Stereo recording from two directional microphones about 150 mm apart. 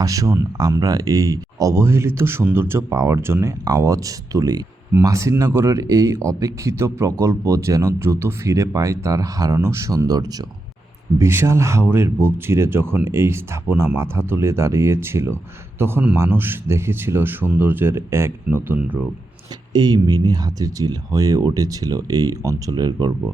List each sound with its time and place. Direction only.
0.0 s speech: 20° right (ahead or behind)
19.7 s speech: 25° right (ahead or behind)